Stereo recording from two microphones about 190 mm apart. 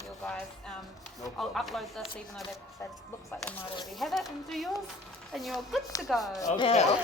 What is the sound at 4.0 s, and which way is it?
Speech, centre (ahead or behind).